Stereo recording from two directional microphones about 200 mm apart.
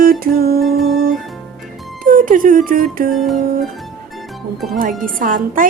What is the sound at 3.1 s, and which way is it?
Humming, centre (ahead or behind).